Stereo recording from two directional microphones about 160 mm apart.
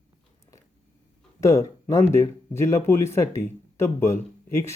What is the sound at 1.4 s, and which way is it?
Speech, 20° left (ahead or behind).